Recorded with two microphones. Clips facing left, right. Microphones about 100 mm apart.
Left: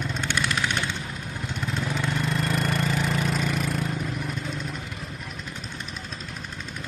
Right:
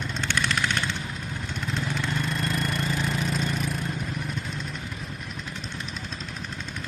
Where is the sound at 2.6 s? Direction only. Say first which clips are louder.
Left 2 dB; 70° left (ahead or behind).